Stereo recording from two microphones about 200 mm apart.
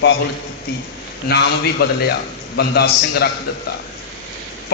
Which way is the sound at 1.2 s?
55° left (ahead or behind).